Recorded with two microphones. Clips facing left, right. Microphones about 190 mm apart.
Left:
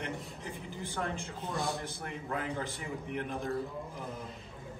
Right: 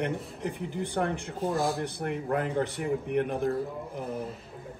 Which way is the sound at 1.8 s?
60° right (ahead or behind).